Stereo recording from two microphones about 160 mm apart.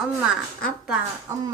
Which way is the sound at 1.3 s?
15° right (ahead or behind).